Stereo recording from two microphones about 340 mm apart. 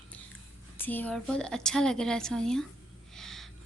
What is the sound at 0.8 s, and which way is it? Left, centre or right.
A woman's voice, centre.